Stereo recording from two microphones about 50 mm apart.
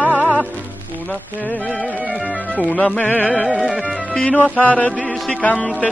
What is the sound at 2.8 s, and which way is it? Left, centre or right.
Music, left.